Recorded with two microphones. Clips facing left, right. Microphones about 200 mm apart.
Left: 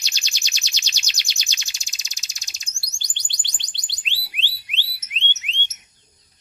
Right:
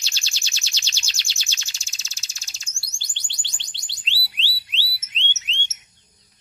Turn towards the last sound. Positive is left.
turn(degrees=15)  # may be behind; listen again after turning